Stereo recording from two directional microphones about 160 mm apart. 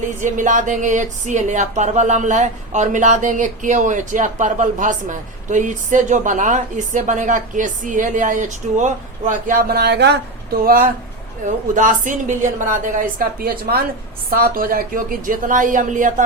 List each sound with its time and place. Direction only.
0.2 s speech: 50° right (ahead or behind); by 10.2 s 90° right
11.4 s a woman's voice: 55° right (ahead or behind)